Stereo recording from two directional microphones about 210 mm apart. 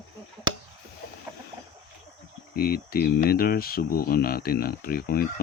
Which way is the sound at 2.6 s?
45° left (ahead or behind).